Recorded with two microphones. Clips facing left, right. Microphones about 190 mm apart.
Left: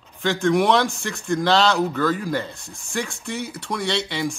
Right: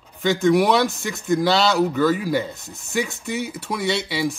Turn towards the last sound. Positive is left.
turn(degrees=-5)  # may be behind; listen again after turning